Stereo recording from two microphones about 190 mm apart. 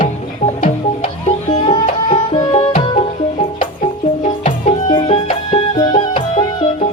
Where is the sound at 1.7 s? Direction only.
25° left (ahead or behind).